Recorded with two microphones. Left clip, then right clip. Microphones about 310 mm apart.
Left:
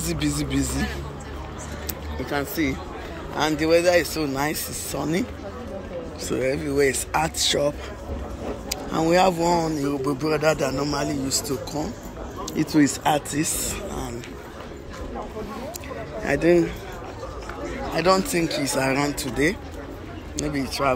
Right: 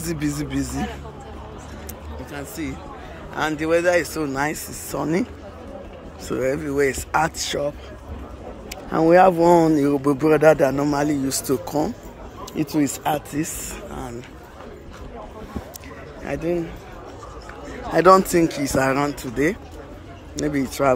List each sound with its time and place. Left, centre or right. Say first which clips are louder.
0.0 s speech: even; centre
2.2 s a man's voice: left 7 dB; centre
6.2 s speech: right 2 dB; centre
12.6 s speech: left 2 dB; centre
16.3 s a man's voice: left 6 dB; centre
17.9 s speech: right 7 dB; centre
20.6 s speech: right 3 dB; right